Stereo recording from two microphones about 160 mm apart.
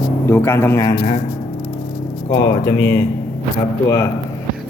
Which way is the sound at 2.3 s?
30° left (ahead or behind).